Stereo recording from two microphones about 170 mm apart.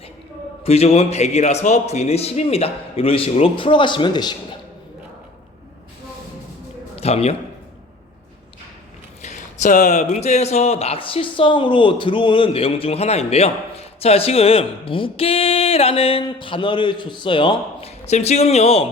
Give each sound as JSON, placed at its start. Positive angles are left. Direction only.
{"t": 0.6, "sound": "speech", "side_deg": 40}
{"t": 6.9, "sound": "a man's voice", "side_deg": 35}
{"t": 9.2, "sound": "speech", "side_deg": 45}